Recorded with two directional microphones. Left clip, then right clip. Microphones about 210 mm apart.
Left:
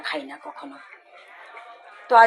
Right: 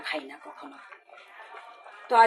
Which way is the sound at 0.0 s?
15° left (ahead or behind).